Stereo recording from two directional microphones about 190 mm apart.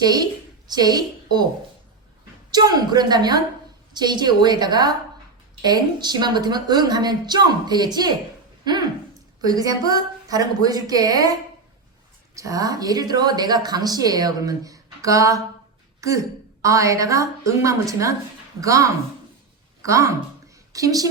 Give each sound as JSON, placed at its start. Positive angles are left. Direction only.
{"t": 0.0, "sound": "a woman's voice", "side_deg": -20}
{"t": 2.5, "sound": "a woman's voice", "side_deg": -20}
{"t": 12.4, "sound": "a woman's voice", "side_deg": -15}
{"t": 19.9, "sound": "a woman's voice", "side_deg": -15}